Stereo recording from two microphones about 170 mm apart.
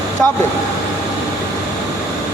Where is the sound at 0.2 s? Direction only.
5° left (ahead or behind).